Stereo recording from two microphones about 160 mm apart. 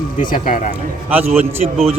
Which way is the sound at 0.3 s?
60° left (ahead or behind).